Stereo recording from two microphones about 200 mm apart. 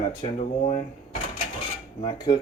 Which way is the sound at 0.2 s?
30° left (ahead or behind).